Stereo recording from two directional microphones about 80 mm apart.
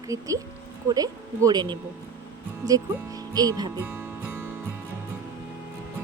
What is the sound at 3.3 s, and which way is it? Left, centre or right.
Speech, right.